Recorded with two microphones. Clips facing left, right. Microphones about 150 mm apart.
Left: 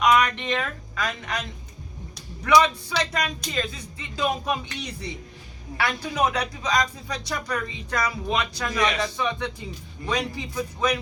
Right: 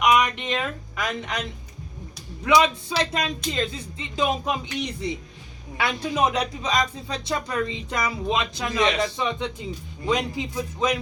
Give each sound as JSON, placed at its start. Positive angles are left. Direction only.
{"t": 0.0, "sound": "speech", "side_deg": -15}
{"t": 2.4, "sound": "speech", "side_deg": -20}